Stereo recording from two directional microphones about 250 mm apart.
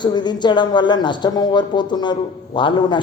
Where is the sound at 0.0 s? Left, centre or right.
Centre.